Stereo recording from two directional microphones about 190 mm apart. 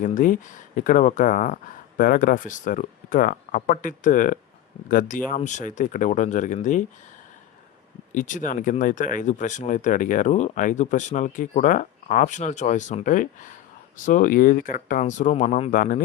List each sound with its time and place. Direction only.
0.0 s speech: 45° left (ahead or behind)
8.1 s speech: 45° left (ahead or behind)